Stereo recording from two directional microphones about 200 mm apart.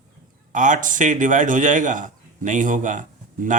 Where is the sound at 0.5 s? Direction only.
40° right (ahead or behind).